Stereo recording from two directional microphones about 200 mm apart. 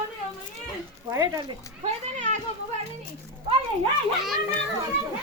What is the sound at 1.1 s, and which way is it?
Speech, 20° right (ahead or behind).